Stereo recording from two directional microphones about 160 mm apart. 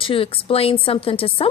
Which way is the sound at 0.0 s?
35° left (ahead or behind).